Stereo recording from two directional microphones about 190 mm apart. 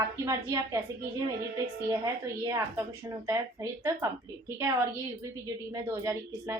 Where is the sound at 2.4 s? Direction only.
15° right (ahead or behind).